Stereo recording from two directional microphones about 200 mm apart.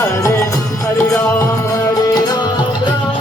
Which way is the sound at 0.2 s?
15° left (ahead or behind).